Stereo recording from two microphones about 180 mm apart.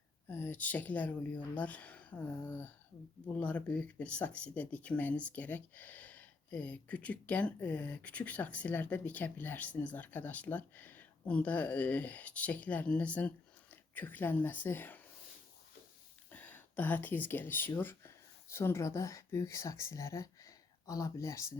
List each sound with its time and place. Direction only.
0.3 s speech: 10° left (ahead or behind)
16.3 s speech: 10° left (ahead or behind)